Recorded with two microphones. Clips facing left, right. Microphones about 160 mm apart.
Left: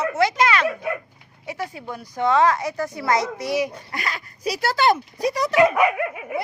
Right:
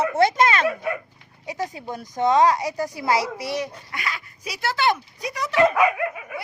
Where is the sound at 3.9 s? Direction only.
40° left (ahead or behind).